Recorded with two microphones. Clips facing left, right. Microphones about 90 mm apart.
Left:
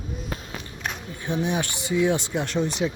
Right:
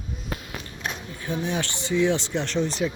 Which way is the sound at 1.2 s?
20° left (ahead or behind).